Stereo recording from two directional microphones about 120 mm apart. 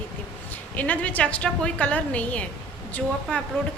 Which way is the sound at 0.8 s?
10° left (ahead or behind).